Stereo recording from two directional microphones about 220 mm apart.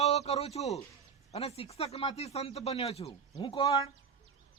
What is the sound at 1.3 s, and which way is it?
Speech, 25° left (ahead or behind).